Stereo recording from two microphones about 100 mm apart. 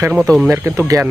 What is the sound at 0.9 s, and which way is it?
Speech, 35° right (ahead or behind).